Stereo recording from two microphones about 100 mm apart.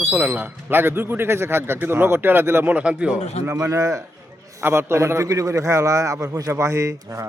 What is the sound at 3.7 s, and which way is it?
A man's voice, 35° right (ahead or behind).